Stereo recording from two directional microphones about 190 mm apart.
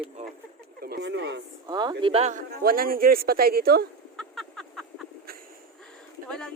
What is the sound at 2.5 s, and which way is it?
Speech, 50° right (ahead or behind).